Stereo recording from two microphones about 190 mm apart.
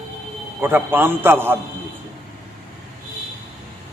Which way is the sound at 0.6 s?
10° right (ahead or behind).